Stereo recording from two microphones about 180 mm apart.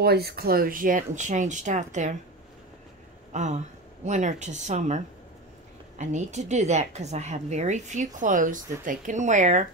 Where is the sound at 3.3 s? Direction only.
40° right (ahead or behind).